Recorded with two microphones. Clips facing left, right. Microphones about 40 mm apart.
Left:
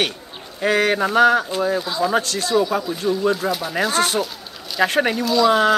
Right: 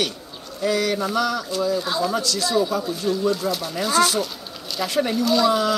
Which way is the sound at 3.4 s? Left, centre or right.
Left.